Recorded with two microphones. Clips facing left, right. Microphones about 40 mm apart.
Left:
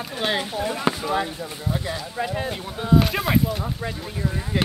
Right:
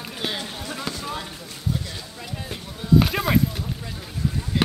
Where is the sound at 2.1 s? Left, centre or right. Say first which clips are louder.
Left 10 dB; left.